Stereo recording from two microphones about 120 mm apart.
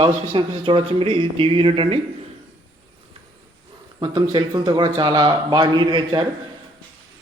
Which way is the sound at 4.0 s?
35° right (ahead or behind).